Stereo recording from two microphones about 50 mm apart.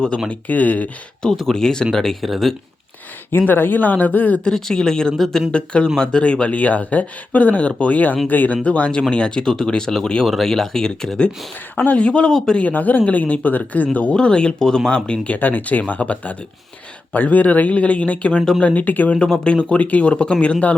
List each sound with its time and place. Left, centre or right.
0.3 s speech: left
1.2 s speech: centre
3.3 s speech: left
4.4 s speech: centre
5.5 s speech: left
8.6 s speech: left
11.8 s speech: left
12.5 s speech: left
15.4 s speech: left
19.1 s speech: centre
19.7 s speech: left